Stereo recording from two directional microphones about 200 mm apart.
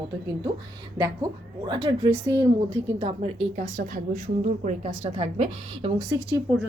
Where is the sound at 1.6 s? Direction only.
25° right (ahead or behind).